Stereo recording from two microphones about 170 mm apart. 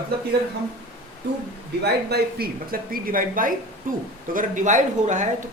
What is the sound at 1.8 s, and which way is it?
Speech, 70° right (ahead or behind).